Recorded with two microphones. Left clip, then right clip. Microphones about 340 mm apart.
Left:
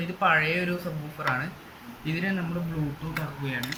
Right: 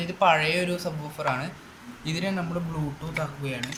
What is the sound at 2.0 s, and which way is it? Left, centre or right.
Speech, centre.